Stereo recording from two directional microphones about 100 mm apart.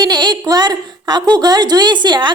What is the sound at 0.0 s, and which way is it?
A woman's voice, 45° right (ahead or behind).